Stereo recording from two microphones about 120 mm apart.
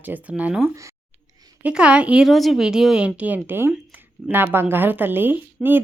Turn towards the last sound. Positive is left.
turn(degrees=-15)  # may be behind; listen again after turning